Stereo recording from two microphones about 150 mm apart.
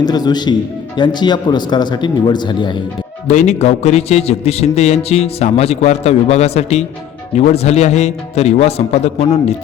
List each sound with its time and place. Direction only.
0.0 s speech: 25° left (ahead or behind)
3.2 s a man's voice: 50° left (ahead or behind)